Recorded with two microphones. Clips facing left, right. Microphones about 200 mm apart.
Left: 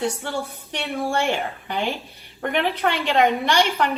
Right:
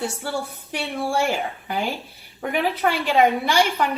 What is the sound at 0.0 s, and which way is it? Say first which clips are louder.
Speech: left 1 dB; 5° right (ahead or behind).